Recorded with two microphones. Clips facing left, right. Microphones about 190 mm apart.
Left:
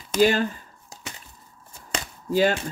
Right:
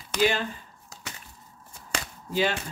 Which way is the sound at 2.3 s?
45° left (ahead or behind).